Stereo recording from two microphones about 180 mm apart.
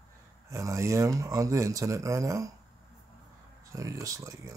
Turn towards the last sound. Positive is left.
turn(degrees=-20)  # may be behind; listen again after turning